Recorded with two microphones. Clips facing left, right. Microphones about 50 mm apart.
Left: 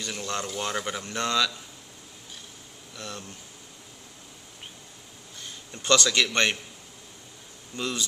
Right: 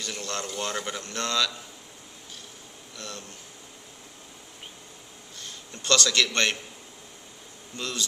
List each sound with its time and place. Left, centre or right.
0.0 s a man's voice: centre
3.0 s a man's voice: centre
5.4 s a man's voice: centre
7.7 s speech: centre